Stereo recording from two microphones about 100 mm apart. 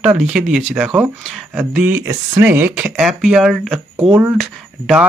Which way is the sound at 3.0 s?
5° right (ahead or behind).